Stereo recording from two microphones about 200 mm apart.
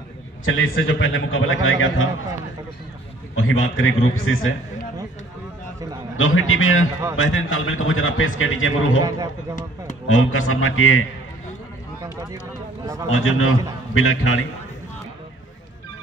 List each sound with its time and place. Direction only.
0.5 s a man's voice: 80° left
3.3 s a man's voice: 85° left
6.1 s a man's voice: 90° left
7.2 s a man's voice: 75° left (ahead or behind)
9.0 s a man's voice: 20° right (ahead or behind)
10.0 s a man's voice: 85° left
12.0 s speech: 15° right (ahead or behind)
13.1 s a man's voice: 90° left